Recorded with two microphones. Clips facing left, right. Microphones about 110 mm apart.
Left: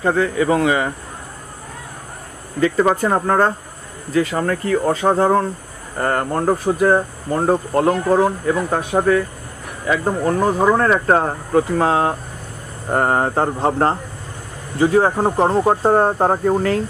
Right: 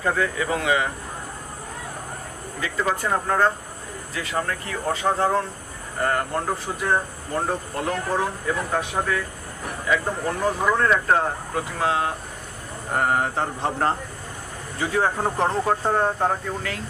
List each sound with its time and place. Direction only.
0.0 s speech: 35° left (ahead or behind)
2.6 s speech: 45° left (ahead or behind)
15.1 s speech: 20° left (ahead or behind); by 16.8 s 40° left (ahead or behind)